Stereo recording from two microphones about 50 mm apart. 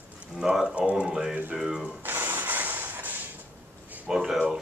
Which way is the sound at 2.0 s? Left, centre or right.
Right.